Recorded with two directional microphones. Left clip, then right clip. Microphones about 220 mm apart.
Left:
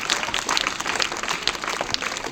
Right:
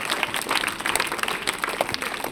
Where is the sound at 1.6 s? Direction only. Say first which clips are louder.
Even; 40° right (ahead or behind).